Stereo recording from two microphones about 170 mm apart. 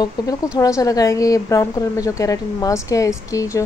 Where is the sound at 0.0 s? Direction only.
20° left (ahead or behind).